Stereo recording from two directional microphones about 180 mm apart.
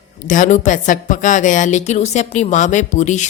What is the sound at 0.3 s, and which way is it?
A woman's voice, 45° left (ahead or behind).